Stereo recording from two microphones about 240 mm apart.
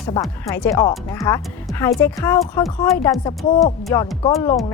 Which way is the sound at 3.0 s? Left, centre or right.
Centre.